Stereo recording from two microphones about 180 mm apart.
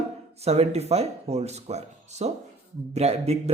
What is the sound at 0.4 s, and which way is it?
Speech, 35° right (ahead or behind).